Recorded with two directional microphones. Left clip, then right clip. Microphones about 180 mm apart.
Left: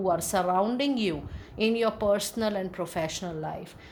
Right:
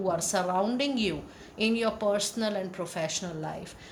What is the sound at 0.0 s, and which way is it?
A woman's voice, 45° left (ahead or behind).